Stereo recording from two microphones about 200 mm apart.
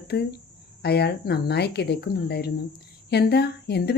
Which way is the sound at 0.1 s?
50° left (ahead or behind).